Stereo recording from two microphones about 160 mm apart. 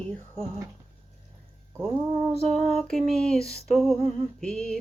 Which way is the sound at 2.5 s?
40° right (ahead or behind).